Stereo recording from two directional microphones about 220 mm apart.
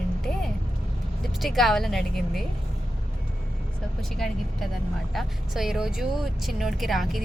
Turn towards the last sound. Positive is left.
turn(degrees=0)  # may be behind; listen again after turning